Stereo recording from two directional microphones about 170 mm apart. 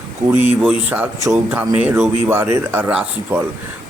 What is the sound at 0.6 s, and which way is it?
Speech, 5° right (ahead or behind).